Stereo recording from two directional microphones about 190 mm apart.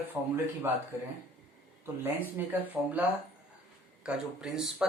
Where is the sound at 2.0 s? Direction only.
10° right (ahead or behind).